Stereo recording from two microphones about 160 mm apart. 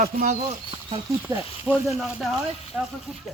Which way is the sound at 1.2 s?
15° right (ahead or behind).